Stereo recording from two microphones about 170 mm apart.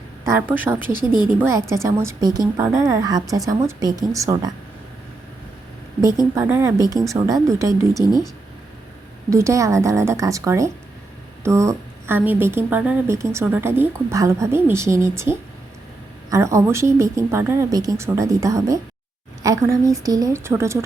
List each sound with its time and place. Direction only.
0.3 s a woman's voice: 10° right (ahead or behind)
6.3 s a woman's voice: 15° right (ahead or behind)
9.3 s a woman's voice: 20° right (ahead or behind)
16.3 s a woman's voice: 15° right (ahead or behind)